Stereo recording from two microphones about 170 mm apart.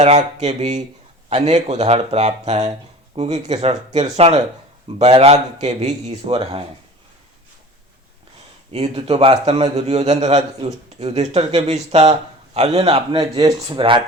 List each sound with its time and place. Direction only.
0.3 s a man's voice: 40° right (ahead or behind)
8.7 s a man's voice: 35° right (ahead or behind)